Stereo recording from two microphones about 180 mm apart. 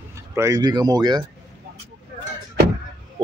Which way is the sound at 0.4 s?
20° right (ahead or behind).